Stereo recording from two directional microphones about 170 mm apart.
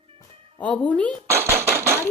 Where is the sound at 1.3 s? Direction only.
15° right (ahead or behind).